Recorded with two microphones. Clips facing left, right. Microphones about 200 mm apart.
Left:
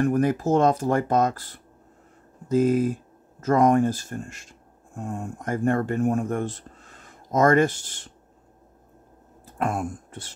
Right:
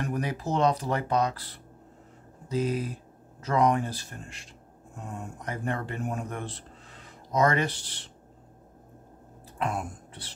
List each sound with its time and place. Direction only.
0.0 s speech: 50° left (ahead or behind)
9.6 s speech: 50° left (ahead or behind)